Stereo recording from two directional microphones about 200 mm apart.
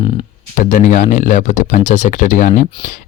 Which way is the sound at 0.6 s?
40° left (ahead or behind).